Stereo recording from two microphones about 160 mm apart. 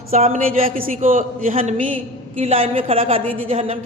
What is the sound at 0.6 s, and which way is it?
Speech, 60° right (ahead or behind).